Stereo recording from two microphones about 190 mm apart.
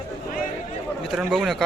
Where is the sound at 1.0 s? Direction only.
Centre (ahead or behind).